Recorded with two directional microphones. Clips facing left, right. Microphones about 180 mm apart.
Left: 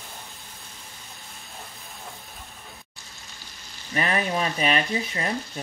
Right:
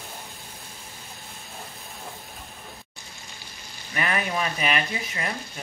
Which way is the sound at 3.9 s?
30° left (ahead or behind).